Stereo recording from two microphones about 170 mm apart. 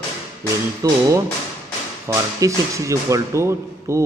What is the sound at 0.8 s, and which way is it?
Speech, 20° right (ahead or behind).